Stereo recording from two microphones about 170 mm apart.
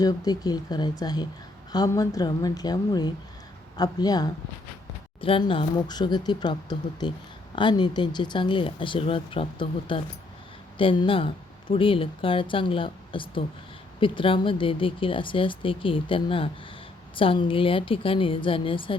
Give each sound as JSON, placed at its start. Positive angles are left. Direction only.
{"t": 0.0, "sound": "speech", "side_deg": 20}